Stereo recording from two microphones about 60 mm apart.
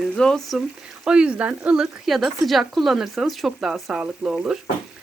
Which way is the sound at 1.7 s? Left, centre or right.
Centre.